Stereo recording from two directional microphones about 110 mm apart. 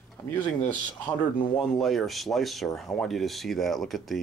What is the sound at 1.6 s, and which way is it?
Speech, centre (ahead or behind).